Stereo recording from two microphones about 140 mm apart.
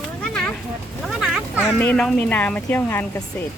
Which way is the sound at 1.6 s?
10° left (ahead or behind).